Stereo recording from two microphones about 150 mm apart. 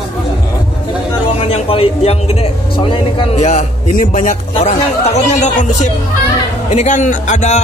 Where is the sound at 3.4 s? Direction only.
50° left (ahead or behind).